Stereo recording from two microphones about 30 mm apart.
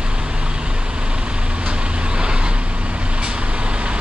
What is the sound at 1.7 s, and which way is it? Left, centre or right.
Vehicle, right.